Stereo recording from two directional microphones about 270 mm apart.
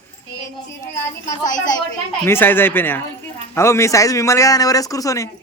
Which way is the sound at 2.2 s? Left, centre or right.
Centre.